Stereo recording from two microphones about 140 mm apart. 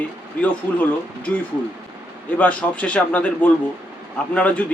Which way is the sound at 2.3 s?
10° left (ahead or behind).